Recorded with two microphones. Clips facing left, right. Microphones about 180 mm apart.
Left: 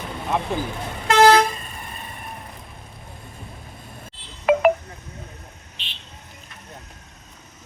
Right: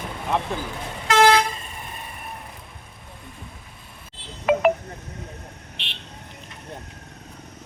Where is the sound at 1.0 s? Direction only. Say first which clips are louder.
Left 3 dB; 40° left (ahead or behind).